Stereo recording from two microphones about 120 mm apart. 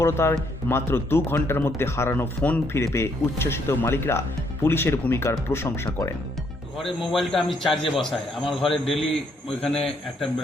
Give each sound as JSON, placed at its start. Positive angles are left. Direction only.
{"t": 0.0, "sound": "speech", "side_deg": 20}
{"t": 6.7, "sound": "a man's voice", "side_deg": 0}